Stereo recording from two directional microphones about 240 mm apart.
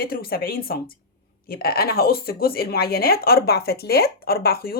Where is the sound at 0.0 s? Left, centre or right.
Left.